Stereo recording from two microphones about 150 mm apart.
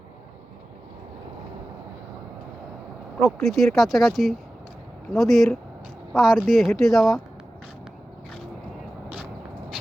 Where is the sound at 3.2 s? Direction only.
Centre (ahead or behind).